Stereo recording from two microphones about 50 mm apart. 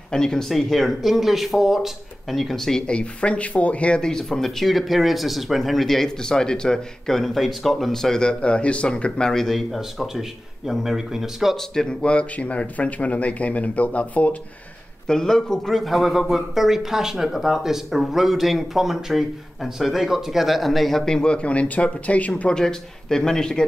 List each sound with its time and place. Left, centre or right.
0.1 s speech: centre
2.9 s speech: left
4.0 s speech: centre
9.7 s speech: centre
11.7 s speech: centre
12.1 s speech: left
15.0 s speech: centre; by 22.5 s left
22.5 s speech: centre